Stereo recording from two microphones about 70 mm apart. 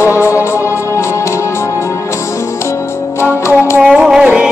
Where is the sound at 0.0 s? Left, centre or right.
Left.